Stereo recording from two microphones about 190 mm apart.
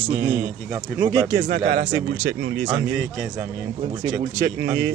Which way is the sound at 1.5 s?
60° right (ahead or behind).